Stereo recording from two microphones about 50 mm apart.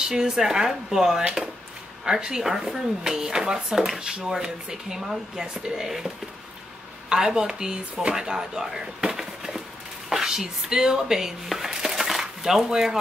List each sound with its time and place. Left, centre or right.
0.0 s speech: centre